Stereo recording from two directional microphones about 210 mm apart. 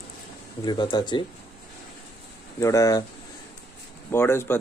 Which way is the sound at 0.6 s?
20° left (ahead or behind).